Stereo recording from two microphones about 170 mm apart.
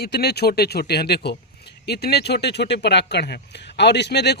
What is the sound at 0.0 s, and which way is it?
Speech, 70° left (ahead or behind).